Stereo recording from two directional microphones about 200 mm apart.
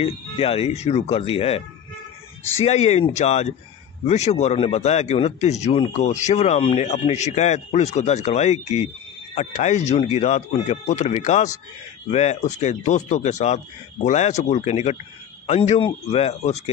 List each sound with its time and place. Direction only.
0.0 s speech: 30° left (ahead or behind)
2.6 s speech: 35° left (ahead or behind)